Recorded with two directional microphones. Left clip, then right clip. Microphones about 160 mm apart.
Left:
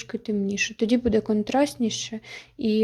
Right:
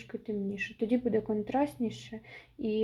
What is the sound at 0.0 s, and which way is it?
Speech, 45° left (ahead or behind).